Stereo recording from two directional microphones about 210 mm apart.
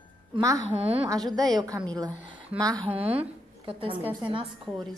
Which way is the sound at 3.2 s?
25° right (ahead or behind).